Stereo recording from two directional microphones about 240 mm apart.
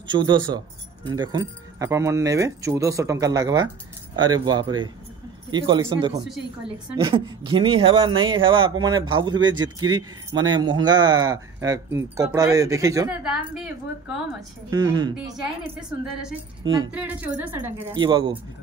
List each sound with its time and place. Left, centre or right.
0.1 s speech: centre
13.2 s a woman's voice: centre
14.7 s speech: centre
16.9 s speech: centre
17.9 s speech: centre